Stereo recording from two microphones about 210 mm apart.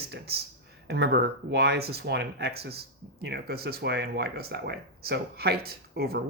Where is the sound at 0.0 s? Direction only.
50° right (ahead or behind).